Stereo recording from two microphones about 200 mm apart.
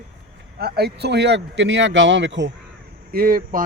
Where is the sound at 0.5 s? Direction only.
55° right (ahead or behind).